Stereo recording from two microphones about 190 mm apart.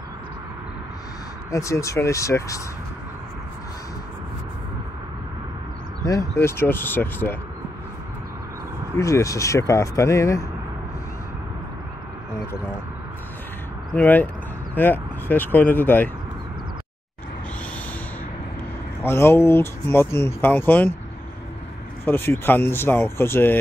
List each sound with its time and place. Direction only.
1.5 s speech: 15° left (ahead or behind)
6.0 s speech: 15° left (ahead or behind)
8.9 s speech: 15° left (ahead or behind)
13.9 s speech: 10° left (ahead or behind)
19.0 s speech: 10° left (ahead or behind)
22.0 s speech: 10° left (ahead or behind)